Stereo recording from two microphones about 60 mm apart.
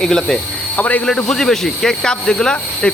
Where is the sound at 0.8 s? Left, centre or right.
Left.